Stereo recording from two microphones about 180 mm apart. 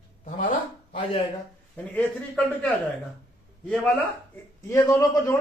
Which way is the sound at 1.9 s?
5° left (ahead or behind).